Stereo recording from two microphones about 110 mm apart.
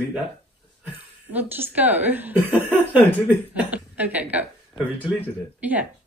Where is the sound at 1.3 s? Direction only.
15° right (ahead or behind).